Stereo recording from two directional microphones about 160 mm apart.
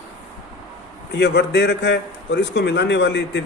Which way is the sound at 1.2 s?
90° left.